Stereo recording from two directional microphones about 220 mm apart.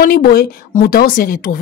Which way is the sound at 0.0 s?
40° left (ahead or behind).